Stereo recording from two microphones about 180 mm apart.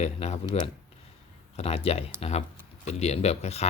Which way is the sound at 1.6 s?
35° left (ahead or behind).